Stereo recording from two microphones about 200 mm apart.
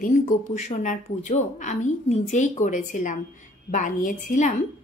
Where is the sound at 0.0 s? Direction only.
40° left (ahead or behind).